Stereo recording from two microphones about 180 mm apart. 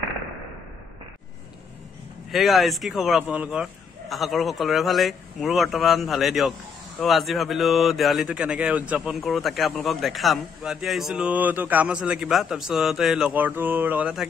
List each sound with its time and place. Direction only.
2.3 s speech: centre (ahead or behind)